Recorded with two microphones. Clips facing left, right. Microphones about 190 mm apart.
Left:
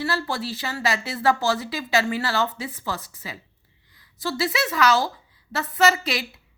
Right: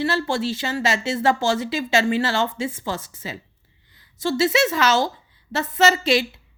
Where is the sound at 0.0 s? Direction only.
25° right (ahead or behind).